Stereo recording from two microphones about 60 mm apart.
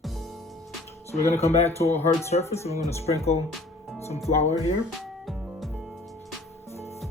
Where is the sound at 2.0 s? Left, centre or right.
Left.